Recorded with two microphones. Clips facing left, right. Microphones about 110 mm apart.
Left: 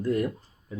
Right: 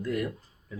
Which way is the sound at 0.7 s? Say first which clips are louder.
Left 4 dB; 25° left (ahead or behind).